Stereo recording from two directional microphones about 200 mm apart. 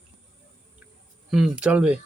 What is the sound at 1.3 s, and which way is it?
Speech, 5° right (ahead or behind).